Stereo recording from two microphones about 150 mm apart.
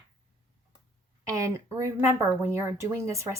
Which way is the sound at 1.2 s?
20° right (ahead or behind).